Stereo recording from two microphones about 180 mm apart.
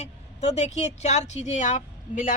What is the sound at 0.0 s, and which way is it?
Speech, 40° left (ahead or behind).